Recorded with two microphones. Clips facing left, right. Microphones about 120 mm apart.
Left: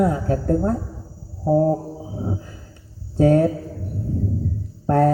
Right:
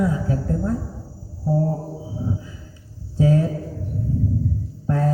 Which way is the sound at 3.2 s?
60° left (ahead or behind).